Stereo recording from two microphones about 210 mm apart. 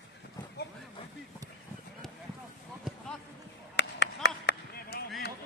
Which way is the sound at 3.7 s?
55° left (ahead or behind).